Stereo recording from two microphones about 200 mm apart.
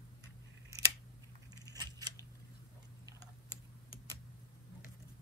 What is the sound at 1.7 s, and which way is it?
Scissors, 20° right (ahead or behind).